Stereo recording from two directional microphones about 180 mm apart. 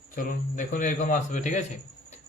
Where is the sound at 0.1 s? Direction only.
50° left (ahead or behind).